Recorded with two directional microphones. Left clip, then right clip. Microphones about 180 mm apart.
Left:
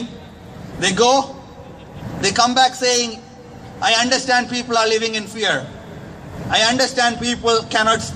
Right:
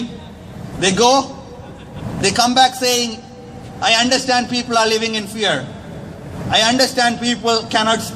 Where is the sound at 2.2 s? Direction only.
20° right (ahead or behind).